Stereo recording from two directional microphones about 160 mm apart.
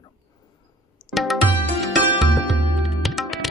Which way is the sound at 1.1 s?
Centre (ahead or behind).